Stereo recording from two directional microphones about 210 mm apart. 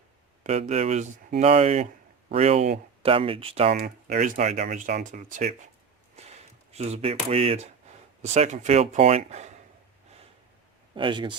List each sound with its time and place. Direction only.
0.4 s speech: 30° right (ahead or behind)
10.9 s speech: 25° right (ahead or behind)